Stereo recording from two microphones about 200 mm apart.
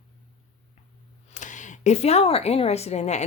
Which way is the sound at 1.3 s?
40° left (ahead or behind).